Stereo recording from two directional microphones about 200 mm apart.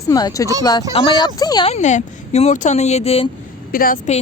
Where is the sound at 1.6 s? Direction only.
35° left (ahead or behind).